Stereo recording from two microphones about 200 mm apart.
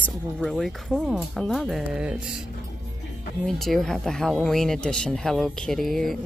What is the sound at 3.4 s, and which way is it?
Speech, centre (ahead or behind).